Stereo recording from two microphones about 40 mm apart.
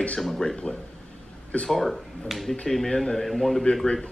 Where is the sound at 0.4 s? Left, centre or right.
Left.